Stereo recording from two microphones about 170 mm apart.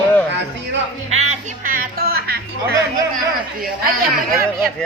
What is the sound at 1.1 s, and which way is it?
Speech, 50° right (ahead or behind).